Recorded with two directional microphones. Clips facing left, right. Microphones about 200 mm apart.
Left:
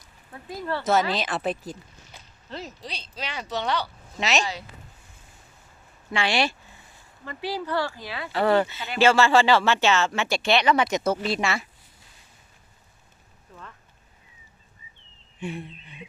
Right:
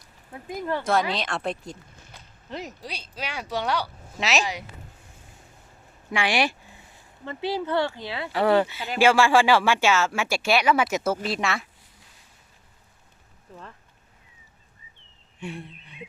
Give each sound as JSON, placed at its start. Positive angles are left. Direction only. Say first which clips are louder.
{"t": 0.3, "sound": "speech", "louder": "right 2 dB", "side_deg": -20}
{"t": 0.9, "sound": "speech", "louder": "left 3 dB", "side_deg": 0}
{"t": 2.1, "sound": "a sound", "louder": "left 1 dB", "side_deg": 0}
{"t": 2.5, "sound": "speech", "louder": "right 1 dB", "side_deg": -15}
{"t": 6.1, "sound": "speech", "louder": "even", "side_deg": -15}
{"t": 8.3, "sound": "speech", "louder": "right 1 dB", "side_deg": -10}
{"t": 15.4, "sound": "a sound", "louder": "left 3 dB", "side_deg": 0}